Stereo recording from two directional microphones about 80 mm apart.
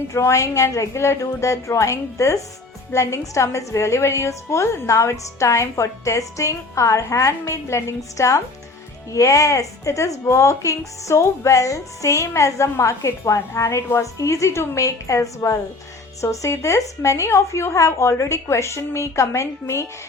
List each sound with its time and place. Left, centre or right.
0.1 s a woman's voice: left